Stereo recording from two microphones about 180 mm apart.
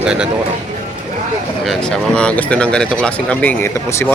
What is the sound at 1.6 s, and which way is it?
Speech, centre (ahead or behind).